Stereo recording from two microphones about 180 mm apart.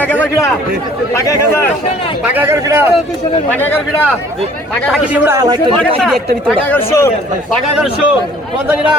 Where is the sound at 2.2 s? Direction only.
10° right (ahead or behind).